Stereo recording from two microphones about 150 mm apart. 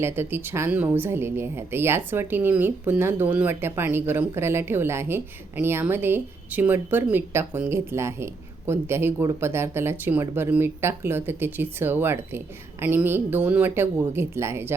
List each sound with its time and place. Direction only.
0.0 s speech: 15° right (ahead or behind)